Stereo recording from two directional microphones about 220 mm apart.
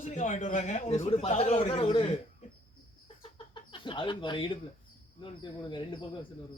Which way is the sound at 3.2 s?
25° left (ahead or behind).